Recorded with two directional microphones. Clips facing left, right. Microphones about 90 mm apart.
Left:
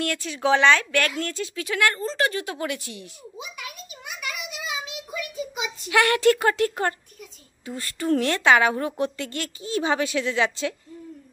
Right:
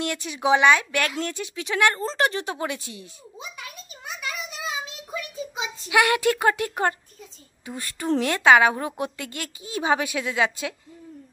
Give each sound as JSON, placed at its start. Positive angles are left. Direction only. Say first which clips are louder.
{"t": 0.0, "sound": "a woman's voice", "louder": "even", "side_deg": -20}
{"t": 3.3, "sound": "a sound", "louder": "left 1 dB", "side_deg": -30}
{"t": 5.9, "sound": "a woman's voice", "louder": "left 1 dB", "side_deg": -15}